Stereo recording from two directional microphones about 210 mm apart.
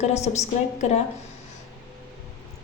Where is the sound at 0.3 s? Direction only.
30° left (ahead or behind).